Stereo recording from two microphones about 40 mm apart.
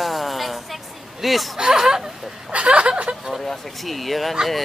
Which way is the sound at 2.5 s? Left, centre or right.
Right.